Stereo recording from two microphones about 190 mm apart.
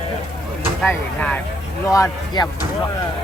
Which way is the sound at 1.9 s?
20° left (ahead or behind).